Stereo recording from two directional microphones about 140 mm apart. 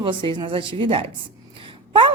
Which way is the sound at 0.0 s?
35° right (ahead or behind).